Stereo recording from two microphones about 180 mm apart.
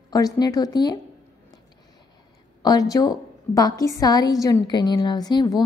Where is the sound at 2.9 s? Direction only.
20° left (ahead or behind).